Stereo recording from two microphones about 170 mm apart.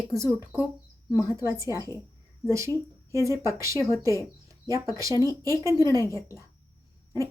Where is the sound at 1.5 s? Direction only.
20° right (ahead or behind).